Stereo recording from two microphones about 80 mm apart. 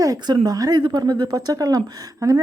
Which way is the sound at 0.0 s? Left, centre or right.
Right.